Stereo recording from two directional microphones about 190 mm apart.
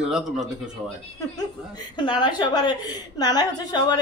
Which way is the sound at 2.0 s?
25° left (ahead or behind).